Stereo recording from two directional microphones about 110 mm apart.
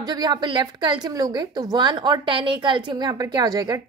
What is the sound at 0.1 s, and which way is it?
A woman's voice, 40° right (ahead or behind).